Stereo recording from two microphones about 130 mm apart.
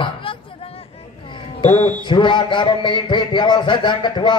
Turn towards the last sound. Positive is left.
turn(degrees=35)  # may be behind; listen again after turning